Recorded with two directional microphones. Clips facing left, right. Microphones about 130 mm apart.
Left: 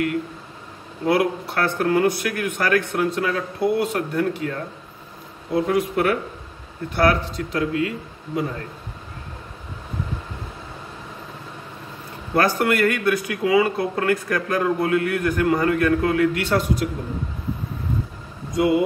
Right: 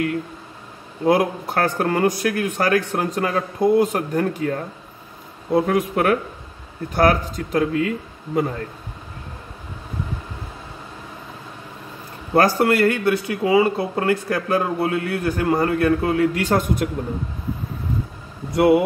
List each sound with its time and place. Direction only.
1.0 s speech: 45° right (ahead or behind)
12.4 s speech: 35° right (ahead or behind)
16.4 s speech: 50° right (ahead or behind)
18.5 s speech: 65° right (ahead or behind)